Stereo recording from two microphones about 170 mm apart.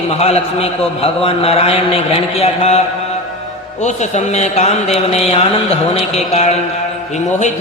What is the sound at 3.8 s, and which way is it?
A man's voice, 40° left (ahead or behind).